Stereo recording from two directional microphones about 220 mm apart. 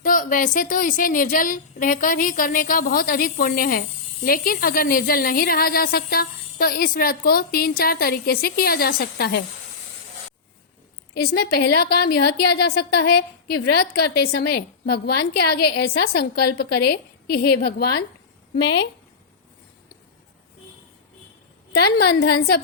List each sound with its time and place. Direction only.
0.0 s speech: 40° left (ahead or behind)
11.1 s a woman's voice: 45° left (ahead or behind)
21.7 s a woman's voice: 45° left (ahead or behind)